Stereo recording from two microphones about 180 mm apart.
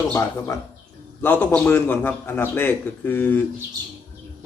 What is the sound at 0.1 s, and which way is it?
A man's voice, 15° left (ahead or behind).